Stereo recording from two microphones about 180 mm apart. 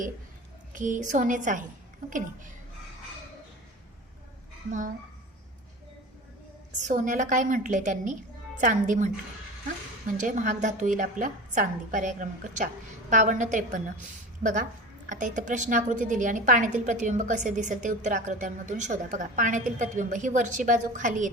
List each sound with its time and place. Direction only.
0.7 s a woman's voice: 45° right (ahead or behind)
6.7 s a woman's voice: 45° right (ahead or behind)
10.2 s a woman's voice: 45° right (ahead or behind)